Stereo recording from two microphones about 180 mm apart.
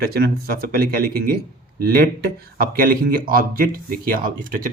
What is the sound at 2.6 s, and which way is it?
A man's voice, 55° right (ahead or behind).